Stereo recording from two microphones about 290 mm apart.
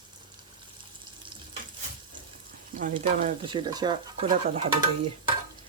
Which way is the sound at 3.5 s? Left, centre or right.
Centre.